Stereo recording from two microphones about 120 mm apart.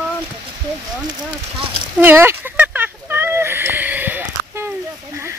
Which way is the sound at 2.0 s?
20° right (ahead or behind).